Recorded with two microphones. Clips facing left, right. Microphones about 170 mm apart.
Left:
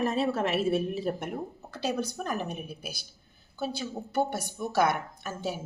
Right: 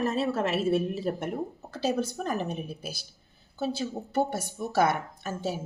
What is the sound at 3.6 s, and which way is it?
Speech, centre (ahead or behind).